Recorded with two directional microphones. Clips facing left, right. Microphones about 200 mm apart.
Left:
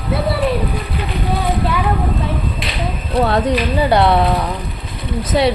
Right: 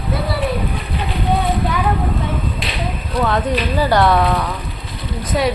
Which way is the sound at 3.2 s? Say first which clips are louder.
Left 3 dB; 35° left (ahead or behind).